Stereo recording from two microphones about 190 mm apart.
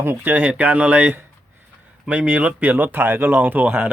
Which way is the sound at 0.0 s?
10° right (ahead or behind).